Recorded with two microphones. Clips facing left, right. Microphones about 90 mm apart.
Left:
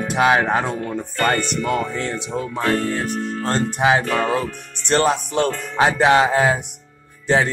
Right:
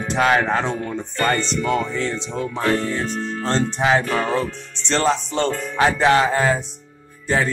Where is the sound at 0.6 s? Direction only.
50° left (ahead or behind).